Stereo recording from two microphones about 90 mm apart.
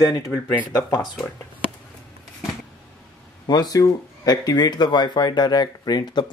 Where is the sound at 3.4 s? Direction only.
45° left (ahead or behind).